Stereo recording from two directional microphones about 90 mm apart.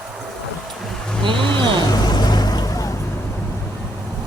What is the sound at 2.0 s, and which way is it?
Vehicle, 50° left (ahead or behind).